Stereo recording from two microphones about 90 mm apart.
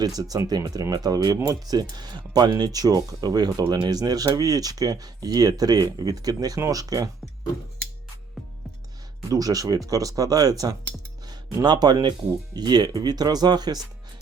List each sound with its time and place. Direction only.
0.0 s speech: 45° right (ahead or behind)
9.3 s speech: 45° right (ahead or behind)
11.6 s speech: 50° right (ahead or behind)